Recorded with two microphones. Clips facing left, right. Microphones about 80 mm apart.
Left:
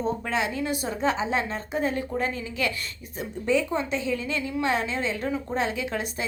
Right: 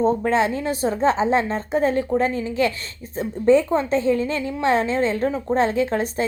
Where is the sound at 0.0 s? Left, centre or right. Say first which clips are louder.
Right 8 dB; right.